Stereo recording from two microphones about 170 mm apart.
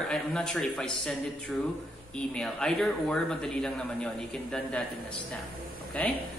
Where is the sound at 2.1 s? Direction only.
5° left (ahead or behind).